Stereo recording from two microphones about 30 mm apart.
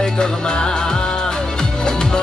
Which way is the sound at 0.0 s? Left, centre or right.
Left.